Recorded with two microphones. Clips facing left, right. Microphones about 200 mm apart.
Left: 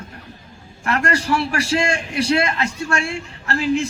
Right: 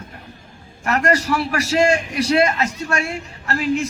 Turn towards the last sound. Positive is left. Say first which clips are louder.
# left 1 dB
turn(degrees=30)  # may be behind; listen again after turning